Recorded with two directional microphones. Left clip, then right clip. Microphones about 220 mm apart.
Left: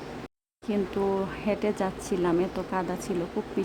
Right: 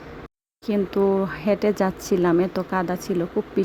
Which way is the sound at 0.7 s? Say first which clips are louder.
Right 6 dB; 25° right (ahead or behind).